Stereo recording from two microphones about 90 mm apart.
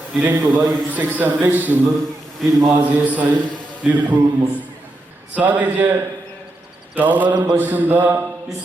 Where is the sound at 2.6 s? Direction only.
35° right (ahead or behind).